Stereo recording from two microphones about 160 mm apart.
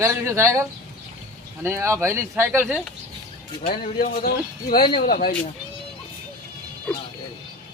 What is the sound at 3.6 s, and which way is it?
Speech, 65° left (ahead or behind).